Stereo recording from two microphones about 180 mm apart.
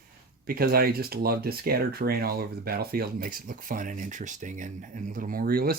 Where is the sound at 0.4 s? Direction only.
55° right (ahead or behind).